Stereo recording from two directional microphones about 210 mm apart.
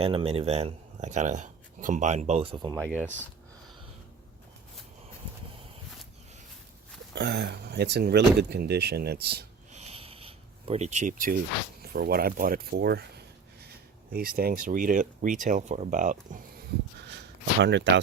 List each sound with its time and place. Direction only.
0.0 s speech: 25° right (ahead or behind)
2.8 s speech: centre (ahead or behind)
7.1 s speech: 50° right (ahead or behind)
9.7 s a sound: 30° right (ahead or behind)
11.8 s speech: 45° right (ahead or behind)
14.1 s speech: 45° right (ahead or behind)
17.1 s a sound: 55° right (ahead or behind)